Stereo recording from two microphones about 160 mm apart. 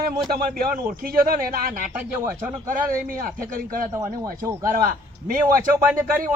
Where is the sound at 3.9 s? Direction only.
20° right (ahead or behind).